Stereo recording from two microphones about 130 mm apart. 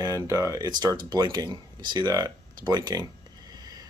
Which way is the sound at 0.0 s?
25° right (ahead or behind).